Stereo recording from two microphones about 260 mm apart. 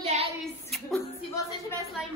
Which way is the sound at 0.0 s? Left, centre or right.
Right.